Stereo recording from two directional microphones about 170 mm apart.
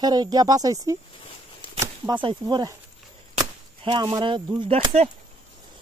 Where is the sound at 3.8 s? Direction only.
25° right (ahead or behind).